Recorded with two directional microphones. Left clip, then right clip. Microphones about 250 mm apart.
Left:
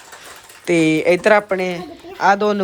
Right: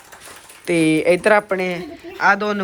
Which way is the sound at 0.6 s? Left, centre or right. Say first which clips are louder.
Left 1 dB; centre.